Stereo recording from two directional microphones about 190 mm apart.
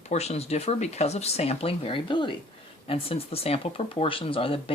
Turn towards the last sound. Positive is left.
turn(degrees=30)  # may be behind; listen again after turning